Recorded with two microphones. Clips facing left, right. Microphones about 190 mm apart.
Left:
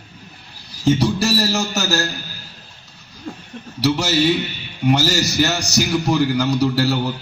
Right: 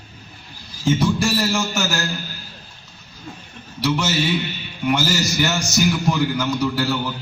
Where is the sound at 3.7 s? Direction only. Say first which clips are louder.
Left 3 dB; 40° left (ahead or behind).